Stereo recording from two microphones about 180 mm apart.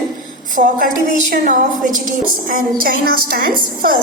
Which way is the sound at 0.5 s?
45° right (ahead or behind).